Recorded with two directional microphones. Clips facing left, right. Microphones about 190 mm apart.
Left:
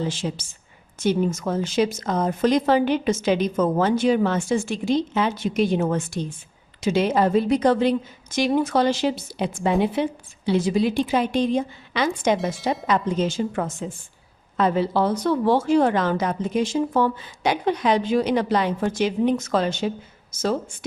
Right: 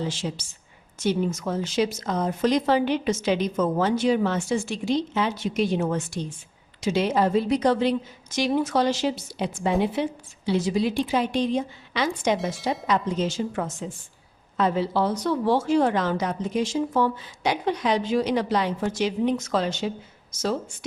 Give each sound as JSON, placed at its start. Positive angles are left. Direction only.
{"t": 0.0, "sound": "a woman's voice", "side_deg": 50}